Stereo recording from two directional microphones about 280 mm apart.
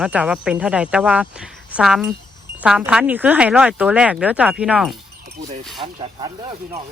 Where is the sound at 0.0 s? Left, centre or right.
Centre.